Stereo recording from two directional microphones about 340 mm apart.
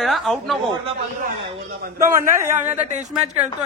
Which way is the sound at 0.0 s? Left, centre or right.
Centre.